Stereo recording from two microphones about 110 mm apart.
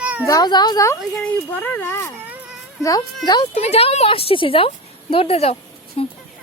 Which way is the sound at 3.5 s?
70° left (ahead or behind).